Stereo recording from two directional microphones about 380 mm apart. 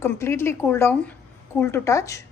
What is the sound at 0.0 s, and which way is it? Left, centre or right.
A woman's voice, centre.